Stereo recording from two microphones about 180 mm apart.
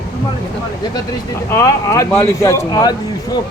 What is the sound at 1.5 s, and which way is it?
A man's voice, 15° left (ahead or behind).